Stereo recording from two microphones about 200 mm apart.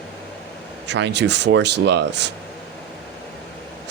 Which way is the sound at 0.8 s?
60° right (ahead or behind).